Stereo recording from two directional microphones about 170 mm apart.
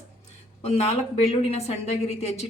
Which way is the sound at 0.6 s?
40° left (ahead or behind).